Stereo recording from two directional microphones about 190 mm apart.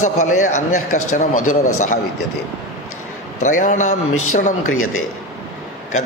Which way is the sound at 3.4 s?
40° left (ahead or behind).